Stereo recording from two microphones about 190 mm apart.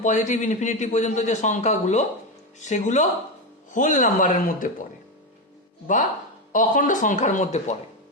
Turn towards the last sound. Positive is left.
turn(degrees=40)  # may be behind; listen again after turning